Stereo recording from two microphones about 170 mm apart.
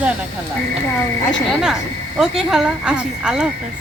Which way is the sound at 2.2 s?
Centre (ahead or behind).